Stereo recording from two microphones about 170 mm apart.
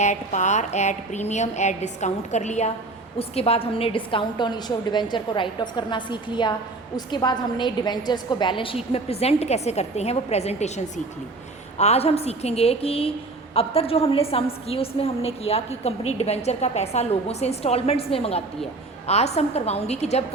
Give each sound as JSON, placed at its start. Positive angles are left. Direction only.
{"t": 0.0, "sound": "a woman's voice", "side_deg": 45}